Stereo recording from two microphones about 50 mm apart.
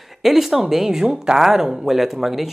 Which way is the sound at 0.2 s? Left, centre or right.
Centre.